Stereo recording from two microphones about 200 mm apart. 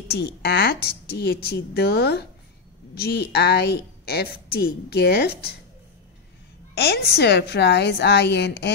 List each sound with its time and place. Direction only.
0.1 s a woman's voice: 55° left (ahead or behind)
6.7 s a woman's voice: 55° left (ahead or behind)